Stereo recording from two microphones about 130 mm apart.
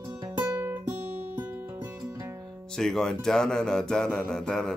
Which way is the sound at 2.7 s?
5° left (ahead or behind).